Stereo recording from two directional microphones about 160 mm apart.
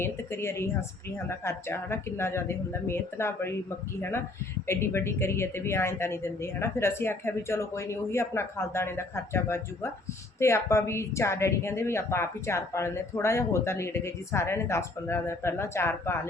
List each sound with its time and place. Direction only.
0.0 s a woman's voice: 15° left (ahead or behind)
4.6 s a woman's voice: 15° left (ahead or behind)